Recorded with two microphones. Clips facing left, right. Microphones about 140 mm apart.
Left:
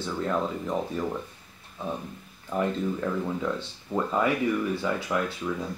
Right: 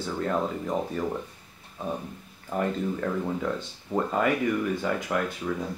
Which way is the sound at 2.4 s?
50° right (ahead or behind).